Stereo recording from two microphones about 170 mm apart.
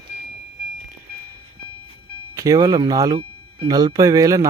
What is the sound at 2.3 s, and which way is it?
Speech, 20° right (ahead or behind).